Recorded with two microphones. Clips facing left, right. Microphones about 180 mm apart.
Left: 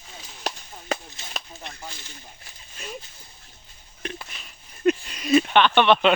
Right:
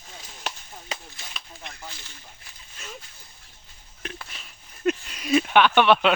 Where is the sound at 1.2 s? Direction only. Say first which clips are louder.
Left 2 dB; 20° left (ahead or behind).